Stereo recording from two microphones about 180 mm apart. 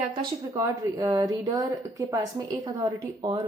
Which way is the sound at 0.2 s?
20° right (ahead or behind).